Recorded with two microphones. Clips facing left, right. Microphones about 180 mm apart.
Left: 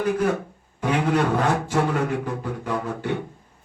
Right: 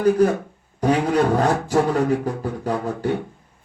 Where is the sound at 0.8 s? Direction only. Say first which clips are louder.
Right 3 dB; 40° right (ahead or behind).